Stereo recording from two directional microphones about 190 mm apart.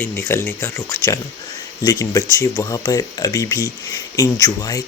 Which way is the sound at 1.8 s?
15° left (ahead or behind).